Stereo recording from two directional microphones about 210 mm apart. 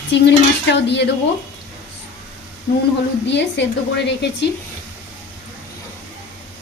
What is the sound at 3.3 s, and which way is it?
Speech, 55° left (ahead or behind).